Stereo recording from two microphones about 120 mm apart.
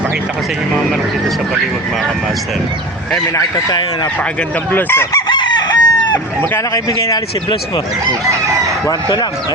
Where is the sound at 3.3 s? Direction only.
35° left (ahead or behind).